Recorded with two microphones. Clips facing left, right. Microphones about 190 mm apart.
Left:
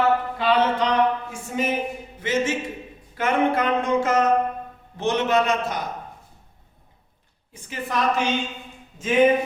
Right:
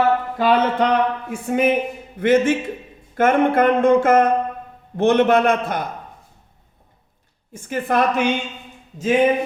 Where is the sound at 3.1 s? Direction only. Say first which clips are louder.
Right 5 dB; 50° right (ahead or behind).